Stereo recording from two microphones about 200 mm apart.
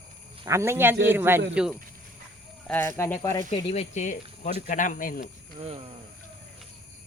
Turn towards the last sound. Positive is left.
turn(degrees=-30)  # may be behind; listen again after turning